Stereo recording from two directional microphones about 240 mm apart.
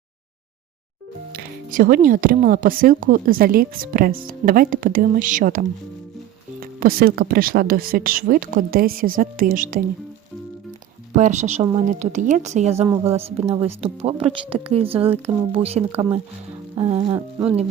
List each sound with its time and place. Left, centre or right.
1.3 s speech: right
11.2 s a woman's voice: right; by 17.6 s centre